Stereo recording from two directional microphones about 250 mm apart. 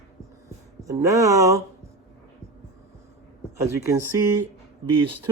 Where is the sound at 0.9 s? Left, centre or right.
Centre.